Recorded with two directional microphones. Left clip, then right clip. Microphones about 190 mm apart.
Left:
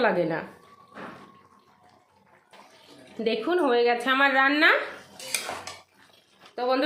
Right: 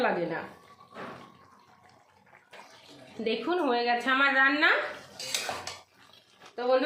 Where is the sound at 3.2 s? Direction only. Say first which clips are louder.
Left 4 dB; 30° left (ahead or behind).